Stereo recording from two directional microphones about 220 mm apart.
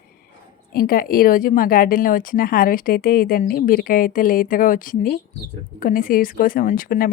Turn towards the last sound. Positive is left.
turn(degrees=40)  # may be behind; listen again after turning